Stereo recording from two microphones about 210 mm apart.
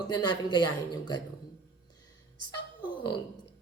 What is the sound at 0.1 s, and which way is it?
Speech, 20° left (ahead or behind).